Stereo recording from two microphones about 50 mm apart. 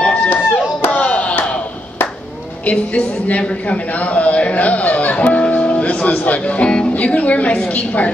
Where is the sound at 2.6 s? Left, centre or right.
Left.